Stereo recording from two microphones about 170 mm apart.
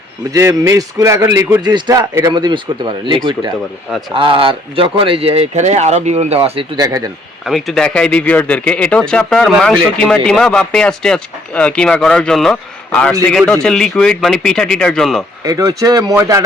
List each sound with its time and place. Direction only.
0.3 s a man's voice: 20° right (ahead or behind); by 6.7 s 35° right (ahead or behind)
6.7 s a man's voice: 20° right (ahead or behind)
7.4 s speech: centre (ahead or behind)
15.4 s a man's voice: 20° right (ahead or behind)